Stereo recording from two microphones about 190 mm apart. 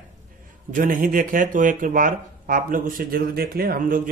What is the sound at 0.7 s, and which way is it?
Speech, 45° right (ahead or behind).